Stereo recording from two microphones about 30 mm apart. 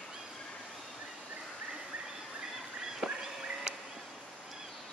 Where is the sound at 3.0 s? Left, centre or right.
Right.